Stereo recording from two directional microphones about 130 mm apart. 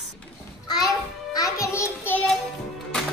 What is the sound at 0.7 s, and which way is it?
Music, 30° left (ahead or behind).